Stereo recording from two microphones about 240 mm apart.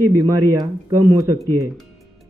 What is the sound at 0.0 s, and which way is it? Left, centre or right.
Speech, right.